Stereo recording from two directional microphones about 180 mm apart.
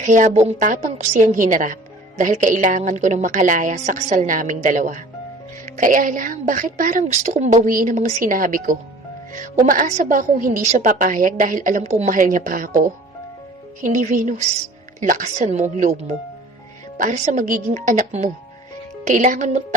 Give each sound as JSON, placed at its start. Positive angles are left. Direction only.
{"t": 0.0, "sound": "a woman's voice", "side_deg": -40}
{"t": 13.8, "sound": "a woman's voice", "side_deg": -40}